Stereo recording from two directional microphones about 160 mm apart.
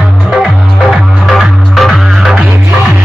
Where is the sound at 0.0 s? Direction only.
Centre (ahead or behind).